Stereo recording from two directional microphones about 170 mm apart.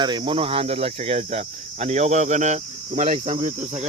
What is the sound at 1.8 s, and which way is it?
Speech, 40° right (ahead or behind).